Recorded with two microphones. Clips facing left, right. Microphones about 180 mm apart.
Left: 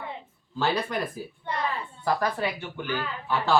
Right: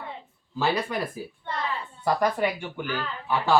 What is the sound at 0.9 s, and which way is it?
Speech, 10° right (ahead or behind).